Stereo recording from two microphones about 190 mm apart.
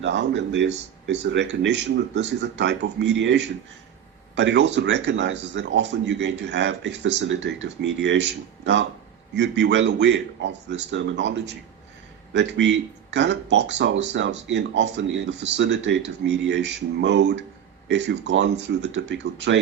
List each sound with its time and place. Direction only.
0.0 s speech: 65° right (ahead or behind)